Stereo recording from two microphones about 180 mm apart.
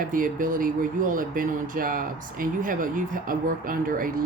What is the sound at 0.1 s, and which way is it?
Speech, 50° right (ahead or behind).